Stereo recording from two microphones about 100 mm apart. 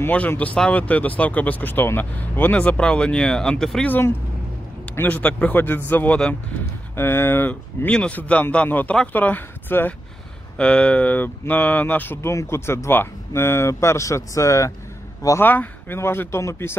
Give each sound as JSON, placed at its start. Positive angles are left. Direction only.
{"t": 0.0, "sound": "speech", "side_deg": 20}
{"t": 4.9, "sound": "speech", "side_deg": 15}
{"t": 7.0, "sound": "speech", "side_deg": 20}